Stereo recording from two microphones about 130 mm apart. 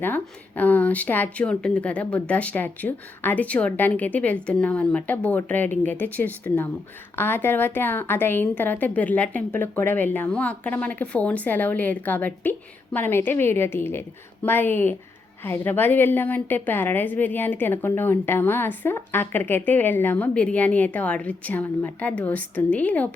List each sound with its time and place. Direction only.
0.0 s a woman's voice: 15° left (ahead or behind)